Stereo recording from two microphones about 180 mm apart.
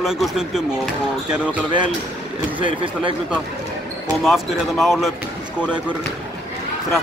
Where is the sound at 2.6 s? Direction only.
30° right (ahead or behind).